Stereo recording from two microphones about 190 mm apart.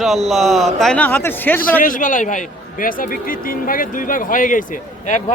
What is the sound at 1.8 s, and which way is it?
Speech, 45° left (ahead or behind).